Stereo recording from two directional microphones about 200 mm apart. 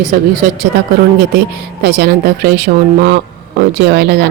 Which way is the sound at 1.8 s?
55° right (ahead or behind).